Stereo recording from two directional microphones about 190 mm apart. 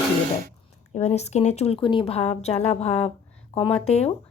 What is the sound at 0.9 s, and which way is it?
A woman's voice, 35° left (ahead or behind).